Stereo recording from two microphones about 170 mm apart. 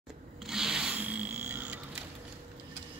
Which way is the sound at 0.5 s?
5° right (ahead or behind).